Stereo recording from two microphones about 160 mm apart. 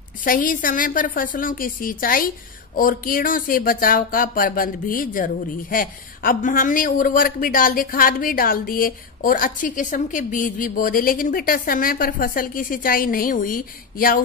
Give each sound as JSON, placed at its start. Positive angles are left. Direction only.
{"t": 0.2, "sound": "a woman's voice", "side_deg": 60}